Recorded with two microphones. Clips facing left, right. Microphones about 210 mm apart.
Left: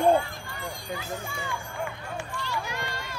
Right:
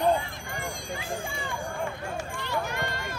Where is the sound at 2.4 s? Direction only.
55° right (ahead or behind).